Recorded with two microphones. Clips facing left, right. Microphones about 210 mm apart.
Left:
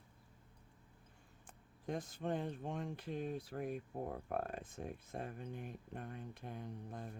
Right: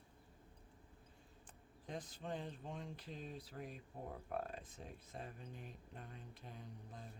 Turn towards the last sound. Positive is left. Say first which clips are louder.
# left 7 dB
turn(degrees=55)  # may be behind; listen again after turning